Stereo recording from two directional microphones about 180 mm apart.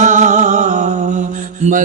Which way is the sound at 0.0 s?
40° right (ahead or behind).